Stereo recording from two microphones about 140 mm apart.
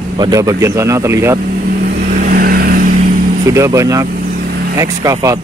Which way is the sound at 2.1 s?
85° right.